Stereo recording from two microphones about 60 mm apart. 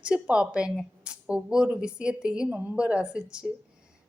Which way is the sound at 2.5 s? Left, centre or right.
Right.